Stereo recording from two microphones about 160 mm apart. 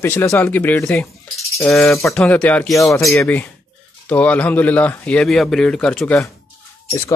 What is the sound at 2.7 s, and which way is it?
Speech, 20° left (ahead or behind).